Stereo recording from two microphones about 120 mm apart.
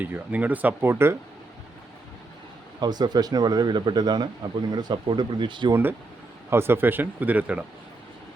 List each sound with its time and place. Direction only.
0.0 s speech: 15° right (ahead or behind)
2.8 s speech: 35° right (ahead or behind)
6.5 s speech: 20° right (ahead or behind)